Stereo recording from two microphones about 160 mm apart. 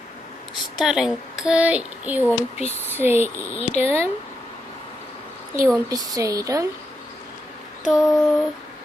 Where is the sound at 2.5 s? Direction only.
40° left (ahead or behind).